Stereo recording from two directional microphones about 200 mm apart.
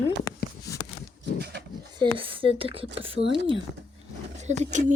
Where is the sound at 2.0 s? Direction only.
25° right (ahead or behind).